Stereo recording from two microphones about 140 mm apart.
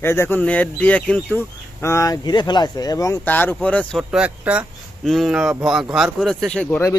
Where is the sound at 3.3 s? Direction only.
10° left (ahead or behind).